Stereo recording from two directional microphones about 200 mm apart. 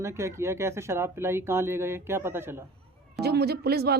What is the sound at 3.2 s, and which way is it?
Speech, 55° right (ahead or behind).